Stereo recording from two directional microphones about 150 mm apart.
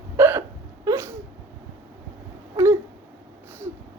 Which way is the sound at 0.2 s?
15° right (ahead or behind).